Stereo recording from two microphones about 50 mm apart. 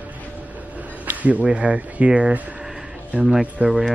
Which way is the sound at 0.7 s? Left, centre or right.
Right.